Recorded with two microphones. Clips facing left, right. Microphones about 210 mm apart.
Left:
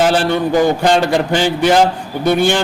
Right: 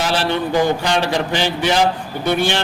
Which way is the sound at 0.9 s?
50° left (ahead or behind).